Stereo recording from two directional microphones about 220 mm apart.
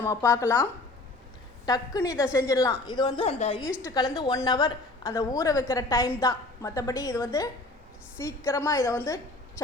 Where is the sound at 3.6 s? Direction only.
5° right (ahead or behind).